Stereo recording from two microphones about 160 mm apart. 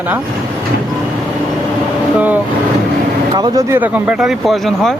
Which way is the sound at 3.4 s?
20° right (ahead or behind).